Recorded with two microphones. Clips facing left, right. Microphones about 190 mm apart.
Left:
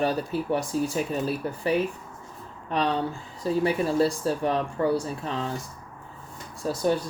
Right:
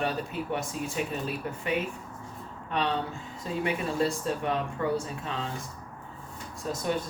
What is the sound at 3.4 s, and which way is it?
Speech, 35° left (ahead or behind).